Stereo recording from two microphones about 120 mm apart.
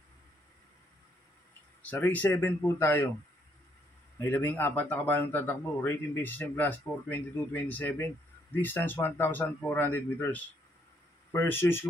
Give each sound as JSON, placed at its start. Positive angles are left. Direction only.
{"t": 1.8, "sound": "speech", "side_deg": 15}
{"t": 4.2, "sound": "speech", "side_deg": 15}